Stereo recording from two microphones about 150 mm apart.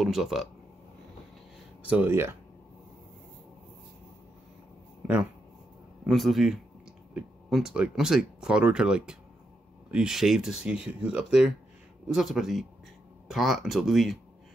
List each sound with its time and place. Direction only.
0.0 s speech: centre (ahead or behind)
1.9 s speech: 15° right (ahead or behind)
6.0 s speech: centre (ahead or behind)